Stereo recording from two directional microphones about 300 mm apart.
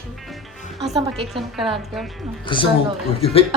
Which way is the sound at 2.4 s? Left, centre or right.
Centre.